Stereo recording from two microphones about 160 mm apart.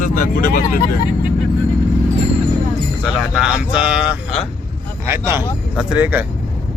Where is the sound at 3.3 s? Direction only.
5° right (ahead or behind).